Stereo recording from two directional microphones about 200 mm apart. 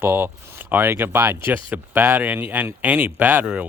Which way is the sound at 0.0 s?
10° right (ahead or behind).